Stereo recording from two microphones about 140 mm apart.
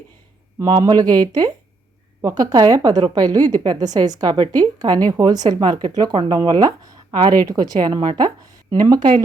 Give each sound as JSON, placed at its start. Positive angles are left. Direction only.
{"t": 0.6, "sound": "a woman's voice", "side_deg": -30}